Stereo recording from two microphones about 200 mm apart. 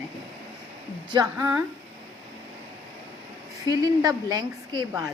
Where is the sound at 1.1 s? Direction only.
15° right (ahead or behind).